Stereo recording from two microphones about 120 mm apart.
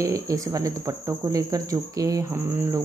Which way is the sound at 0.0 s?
25° right (ahead or behind).